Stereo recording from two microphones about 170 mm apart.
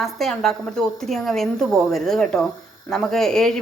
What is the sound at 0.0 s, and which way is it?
A woman's voice, centre (ahead or behind).